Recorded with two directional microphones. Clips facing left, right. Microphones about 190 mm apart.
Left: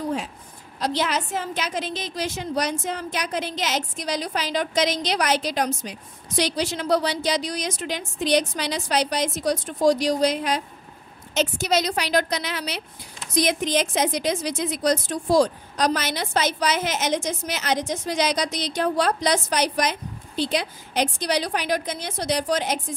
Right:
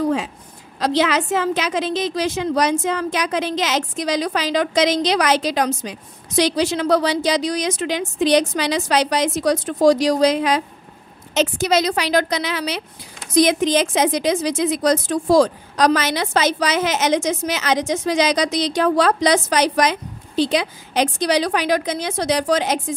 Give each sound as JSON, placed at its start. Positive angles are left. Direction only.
{"t": 0.7, "sound": "a woman's voice", "side_deg": -90}